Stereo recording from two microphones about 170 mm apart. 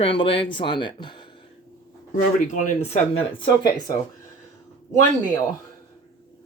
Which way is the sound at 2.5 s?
45° left (ahead or behind).